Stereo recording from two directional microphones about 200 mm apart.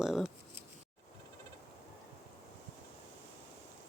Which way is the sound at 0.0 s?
Centre (ahead or behind).